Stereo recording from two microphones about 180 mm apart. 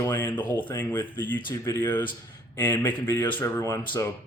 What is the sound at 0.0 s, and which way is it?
Speech, 15° left (ahead or behind).